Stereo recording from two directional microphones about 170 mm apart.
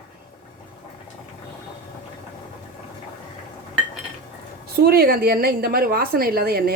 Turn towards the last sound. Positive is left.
turn(degrees=-65)  # may be behind; listen again after turning